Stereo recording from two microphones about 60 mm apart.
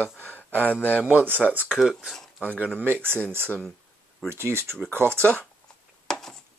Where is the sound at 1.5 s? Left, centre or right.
Right.